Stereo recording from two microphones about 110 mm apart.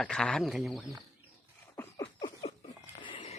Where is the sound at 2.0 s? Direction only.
40° left (ahead or behind).